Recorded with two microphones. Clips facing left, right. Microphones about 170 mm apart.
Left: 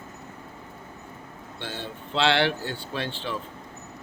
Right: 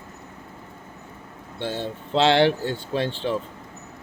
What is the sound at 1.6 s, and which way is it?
Speech, 45° right (ahead or behind).